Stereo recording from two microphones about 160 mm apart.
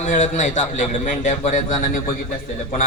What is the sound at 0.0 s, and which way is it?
A man's voice, 50° left (ahead or behind).